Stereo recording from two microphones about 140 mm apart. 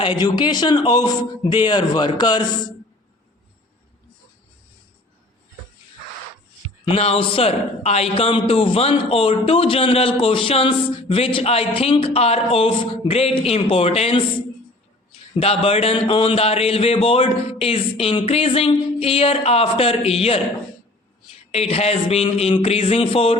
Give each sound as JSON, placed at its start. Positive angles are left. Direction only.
{"t": 0.0, "sound": "a man's voice", "side_deg": 35}
{"t": 6.8, "sound": "a man's voice", "side_deg": 45}
{"t": 15.4, "sound": "a man's voice", "side_deg": 45}
{"t": 21.5, "sound": "a man's voice", "side_deg": 45}